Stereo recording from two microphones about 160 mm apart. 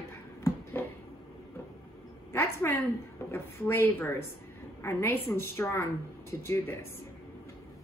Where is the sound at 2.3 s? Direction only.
15° left (ahead or behind).